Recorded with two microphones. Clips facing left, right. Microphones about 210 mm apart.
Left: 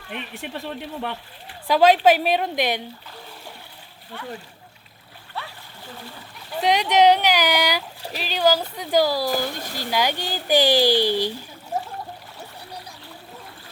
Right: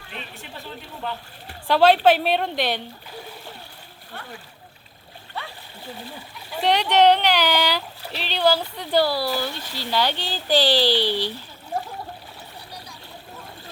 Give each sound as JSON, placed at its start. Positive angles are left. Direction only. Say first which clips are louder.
{"t": 0.1, "sound": "speech", "louder": "left 6 dB", "side_deg": 60}
{"t": 1.6, "sound": "speech", "louder": "even", "side_deg": 10}
{"t": 6.6, "sound": "speech", "louder": "even", "side_deg": 10}
{"t": 9.3, "sound": "speech", "louder": "left 2 dB", "side_deg": 50}
{"t": 9.9, "sound": "speech", "louder": "even", "side_deg": 10}
{"t": 10.8, "sound": "speech", "louder": "left 2 dB", "side_deg": 45}